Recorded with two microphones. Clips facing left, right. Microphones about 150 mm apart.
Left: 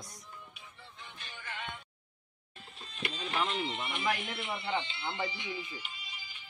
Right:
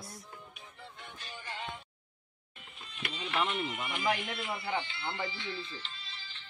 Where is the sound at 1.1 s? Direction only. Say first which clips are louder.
Right 1 dB; 35° right (ahead or behind).